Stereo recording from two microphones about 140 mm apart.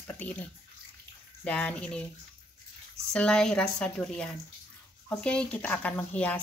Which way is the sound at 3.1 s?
5° left (ahead or behind).